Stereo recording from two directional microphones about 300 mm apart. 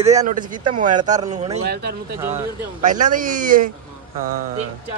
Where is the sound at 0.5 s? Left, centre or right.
Right.